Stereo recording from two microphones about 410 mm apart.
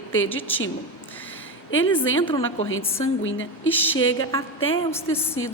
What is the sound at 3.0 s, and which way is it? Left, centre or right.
Speech, left.